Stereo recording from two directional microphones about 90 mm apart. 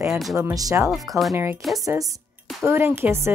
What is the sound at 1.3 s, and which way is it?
Speech, 30° right (ahead or behind).